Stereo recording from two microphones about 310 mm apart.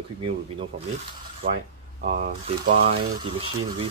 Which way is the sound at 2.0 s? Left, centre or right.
Right.